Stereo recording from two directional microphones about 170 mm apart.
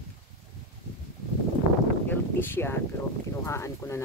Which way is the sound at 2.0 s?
15° left (ahead or behind).